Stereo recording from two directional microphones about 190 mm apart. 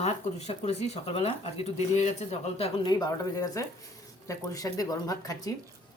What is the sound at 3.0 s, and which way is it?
Speech, 20° left (ahead or behind).